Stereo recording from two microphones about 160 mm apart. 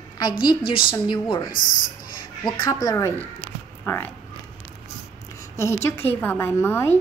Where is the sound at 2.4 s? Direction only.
25° left (ahead or behind).